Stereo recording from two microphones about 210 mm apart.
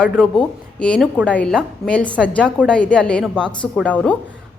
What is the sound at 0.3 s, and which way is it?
A woman's voice, 5° left (ahead or behind).